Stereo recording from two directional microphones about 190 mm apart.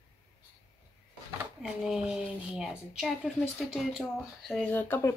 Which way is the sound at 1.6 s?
5° right (ahead or behind).